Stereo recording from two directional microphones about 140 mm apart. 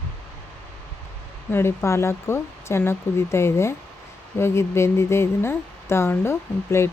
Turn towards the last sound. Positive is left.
turn(degrees=20)  # may be behind; listen again after turning